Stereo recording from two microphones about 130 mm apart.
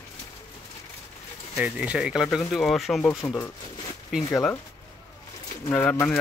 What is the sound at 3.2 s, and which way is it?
Speech, 15° left (ahead or behind).